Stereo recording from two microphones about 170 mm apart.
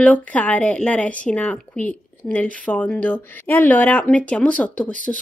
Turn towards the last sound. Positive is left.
turn(degrees=-50)  # may be behind; listen again after turning